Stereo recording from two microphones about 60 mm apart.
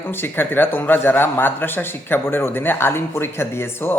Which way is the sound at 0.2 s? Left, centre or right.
Left.